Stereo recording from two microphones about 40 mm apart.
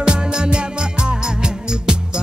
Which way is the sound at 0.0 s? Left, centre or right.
Right.